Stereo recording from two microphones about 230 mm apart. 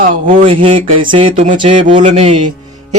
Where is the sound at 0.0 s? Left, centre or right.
Right.